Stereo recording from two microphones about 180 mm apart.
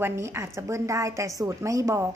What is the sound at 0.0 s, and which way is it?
Speech, 15° right (ahead or behind).